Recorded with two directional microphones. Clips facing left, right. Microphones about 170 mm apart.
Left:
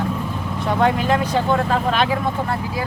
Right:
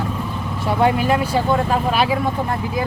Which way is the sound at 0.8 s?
10° right (ahead or behind).